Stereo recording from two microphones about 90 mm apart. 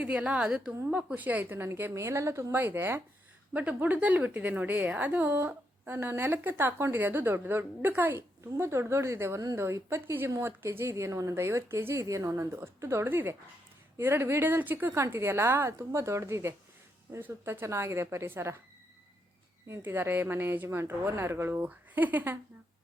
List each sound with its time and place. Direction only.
0.0 s a woman's voice: 15° right (ahead or behind); by 18.6 s 30° right (ahead or behind)
19.6 s a woman's voice: 30° right (ahead or behind)